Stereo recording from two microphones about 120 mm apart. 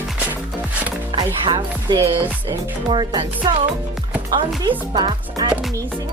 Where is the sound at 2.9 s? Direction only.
40° right (ahead or behind).